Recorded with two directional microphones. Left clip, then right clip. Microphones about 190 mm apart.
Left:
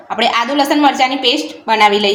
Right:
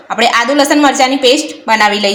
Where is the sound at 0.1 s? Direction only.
25° right (ahead or behind).